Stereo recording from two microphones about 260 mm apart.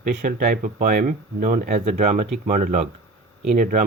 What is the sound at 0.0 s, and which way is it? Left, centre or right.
Speech, right.